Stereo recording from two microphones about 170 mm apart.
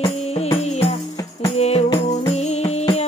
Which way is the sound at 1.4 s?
40° left (ahead or behind).